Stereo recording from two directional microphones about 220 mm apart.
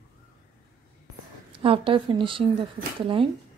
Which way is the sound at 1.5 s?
25° right (ahead or behind).